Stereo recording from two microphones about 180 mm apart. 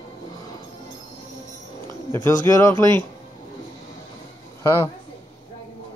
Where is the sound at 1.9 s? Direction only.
25° right (ahead or behind).